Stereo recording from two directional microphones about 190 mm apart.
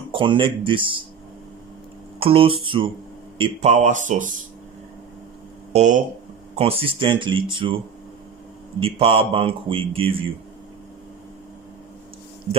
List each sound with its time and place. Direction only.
0.1 s a man's voice: 25° right (ahead or behind)
2.1 s a man's voice: 30° right (ahead or behind)
5.7 s a man's voice: 40° right (ahead or behind)